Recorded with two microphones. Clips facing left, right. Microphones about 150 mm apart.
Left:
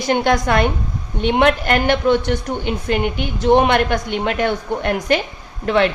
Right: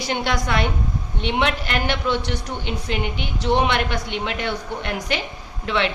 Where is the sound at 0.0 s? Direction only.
50° left (ahead or behind).